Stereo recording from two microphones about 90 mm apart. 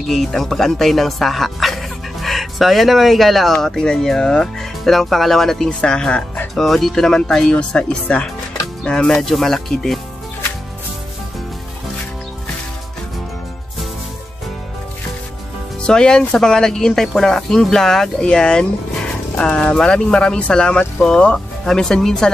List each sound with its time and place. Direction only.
0.1 s speech: centre (ahead or behind)
6.5 s speech: 5° left (ahead or behind)
15.8 s speech: 10° left (ahead or behind)